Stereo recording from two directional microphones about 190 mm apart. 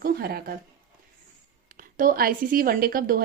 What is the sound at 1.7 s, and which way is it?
A woman's voice, 45° right (ahead or behind).